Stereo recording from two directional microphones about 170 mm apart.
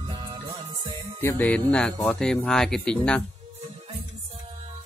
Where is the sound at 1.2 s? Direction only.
10° left (ahead or behind).